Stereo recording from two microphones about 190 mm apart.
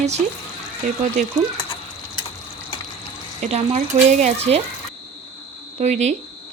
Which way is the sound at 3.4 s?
35° right (ahead or behind).